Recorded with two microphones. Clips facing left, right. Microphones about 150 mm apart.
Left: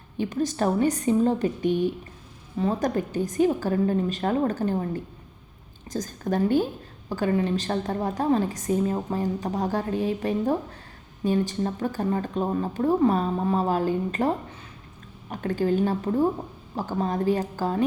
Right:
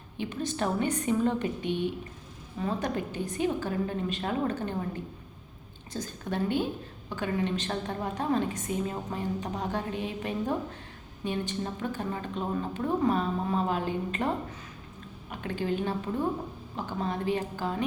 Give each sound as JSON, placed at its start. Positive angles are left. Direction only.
{"t": 0.2, "sound": "a woman's voice", "side_deg": 40}
{"t": 5.9, "sound": "a woman's voice", "side_deg": 40}
{"t": 15.3, "sound": "a woman's voice", "side_deg": 40}